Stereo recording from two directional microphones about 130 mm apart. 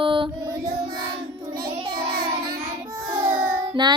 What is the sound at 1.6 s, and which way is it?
Child singing, 35° right (ahead or behind).